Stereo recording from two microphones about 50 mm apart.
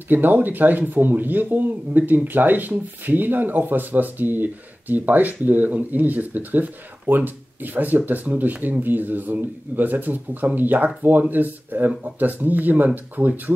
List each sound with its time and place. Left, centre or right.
0.1 s speech: right